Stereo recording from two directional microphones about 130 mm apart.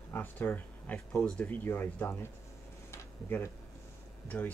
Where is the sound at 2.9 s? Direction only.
20° left (ahead or behind).